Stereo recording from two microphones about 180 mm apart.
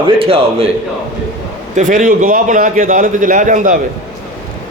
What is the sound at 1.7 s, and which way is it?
A man's voice, 45° right (ahead or behind).